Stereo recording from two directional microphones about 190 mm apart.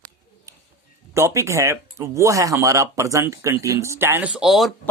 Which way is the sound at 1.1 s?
15° right (ahead or behind).